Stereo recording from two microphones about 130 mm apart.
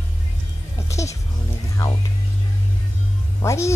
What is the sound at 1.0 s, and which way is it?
Music, 25° left (ahead or behind).